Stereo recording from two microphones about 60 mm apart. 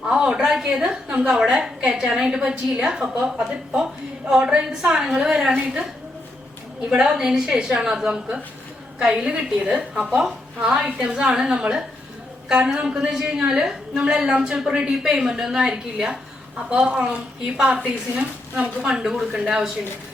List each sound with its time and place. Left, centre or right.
0.0 s a sound: centre
1.3 s a woman's voice: centre
4.3 s a woman's voice: centre
6.9 s a woman's voice: centre